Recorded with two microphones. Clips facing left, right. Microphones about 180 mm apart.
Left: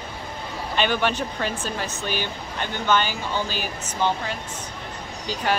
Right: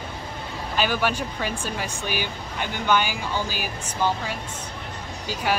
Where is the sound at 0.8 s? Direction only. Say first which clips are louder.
Left 1 dB; 5° right (ahead or behind).